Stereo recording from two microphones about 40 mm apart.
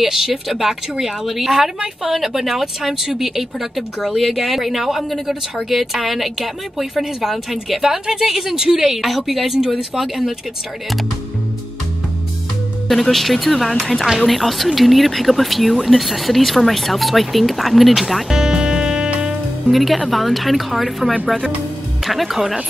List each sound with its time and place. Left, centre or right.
0.0 s speech: centre
13.0 s speech: centre
18.3 s music: centre
19.7 s speech: centre